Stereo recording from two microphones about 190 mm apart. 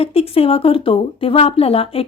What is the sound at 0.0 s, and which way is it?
A woman's voice, 30° left (ahead or behind).